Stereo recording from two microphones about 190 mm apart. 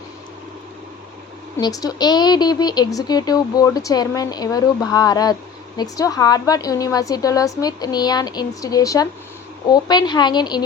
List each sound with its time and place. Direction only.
1.6 s speech: 20° left (ahead or behind)